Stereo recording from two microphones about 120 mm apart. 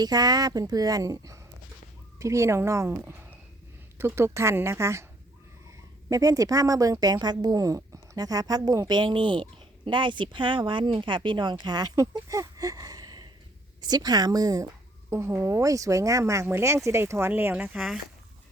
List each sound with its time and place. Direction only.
0.0 s a woman's voice: 35° right (ahead or behind)
6.1 s a woman's voice: 30° right (ahead or behind)
17.7 s speech: centre (ahead or behind)